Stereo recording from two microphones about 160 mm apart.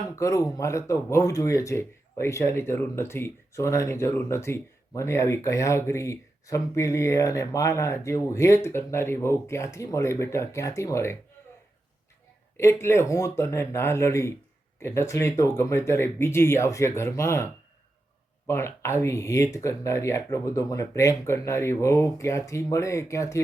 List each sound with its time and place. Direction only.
0.2 s speech: 20° left (ahead or behind)
12.5 s speech: 15° left (ahead or behind)